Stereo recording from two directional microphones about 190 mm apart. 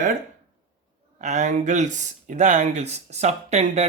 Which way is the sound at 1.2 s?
40° right (ahead or behind).